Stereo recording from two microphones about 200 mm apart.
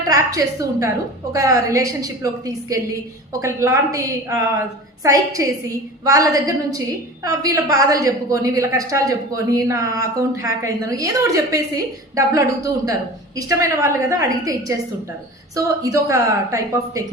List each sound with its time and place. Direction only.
0.1 s a woman's voice: 15° right (ahead or behind)
3.4 s a woman's voice: 15° right (ahead or behind)